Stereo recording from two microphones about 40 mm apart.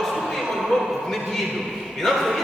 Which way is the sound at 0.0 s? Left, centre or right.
Centre.